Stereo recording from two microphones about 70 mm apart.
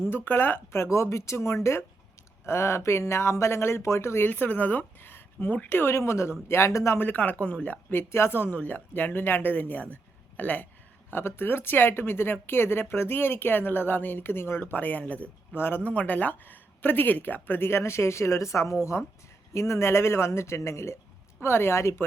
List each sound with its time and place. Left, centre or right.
0.1 s speech: left
4.3 s speech: left
7.0 s speech: left
11.1 s speech: left